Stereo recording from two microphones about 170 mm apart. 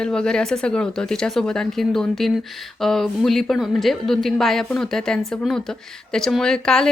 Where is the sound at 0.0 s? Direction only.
5° left (ahead or behind).